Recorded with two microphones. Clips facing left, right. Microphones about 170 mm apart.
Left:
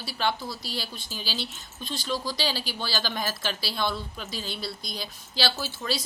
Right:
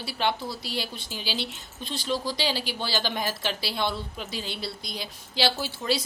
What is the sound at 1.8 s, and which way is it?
A woman's voice, 25° right (ahead or behind).